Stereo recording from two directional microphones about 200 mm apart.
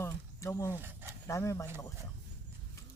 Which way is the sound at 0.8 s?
10° right (ahead or behind).